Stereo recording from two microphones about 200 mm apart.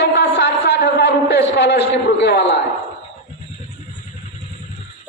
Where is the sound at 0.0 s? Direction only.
55° left (ahead or behind).